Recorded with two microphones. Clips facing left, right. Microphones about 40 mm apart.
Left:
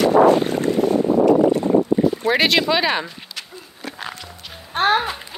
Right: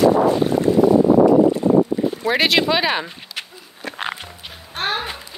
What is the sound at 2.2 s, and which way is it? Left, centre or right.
Speech, centre.